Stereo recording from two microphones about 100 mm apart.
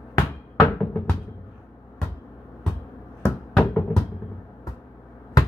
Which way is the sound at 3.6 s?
10° left (ahead or behind).